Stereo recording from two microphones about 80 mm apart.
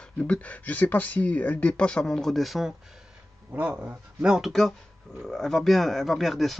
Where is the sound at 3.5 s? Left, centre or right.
Centre.